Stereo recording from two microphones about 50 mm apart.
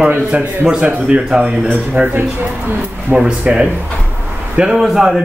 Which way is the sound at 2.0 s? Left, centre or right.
Right.